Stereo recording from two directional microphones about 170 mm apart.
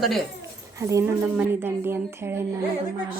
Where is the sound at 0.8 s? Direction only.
20° right (ahead or behind).